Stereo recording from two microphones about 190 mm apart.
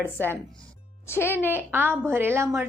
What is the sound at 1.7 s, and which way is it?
Speech, 10° right (ahead or behind).